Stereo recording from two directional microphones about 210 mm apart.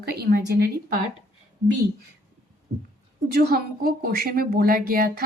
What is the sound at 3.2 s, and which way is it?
A woman's voice, 45° right (ahead or behind).